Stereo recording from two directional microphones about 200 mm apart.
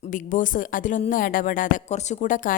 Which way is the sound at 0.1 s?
40° left (ahead or behind).